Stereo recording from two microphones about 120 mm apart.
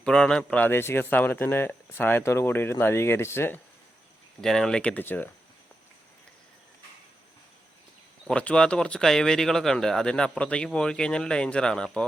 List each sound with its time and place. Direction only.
0.0 s speech: 5° left (ahead or behind)
4.4 s speech: 5° left (ahead or behind)
8.3 s speech: 10° left (ahead or behind)